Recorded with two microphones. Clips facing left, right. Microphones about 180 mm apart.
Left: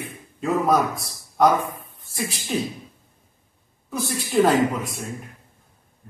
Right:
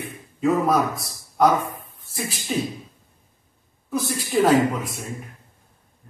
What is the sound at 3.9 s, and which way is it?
Speech, centre (ahead or behind).